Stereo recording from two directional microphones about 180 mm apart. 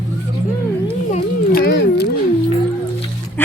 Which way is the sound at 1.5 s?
65° left (ahead or behind).